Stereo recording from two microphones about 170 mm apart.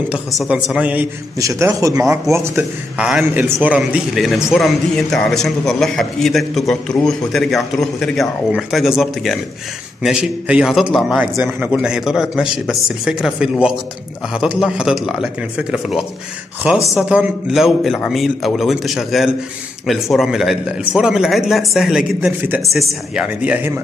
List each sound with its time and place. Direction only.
0.1 s a woman's voice: 5° right (ahead or behind)
1.4 s a woman's voice: 20° right (ahead or behind)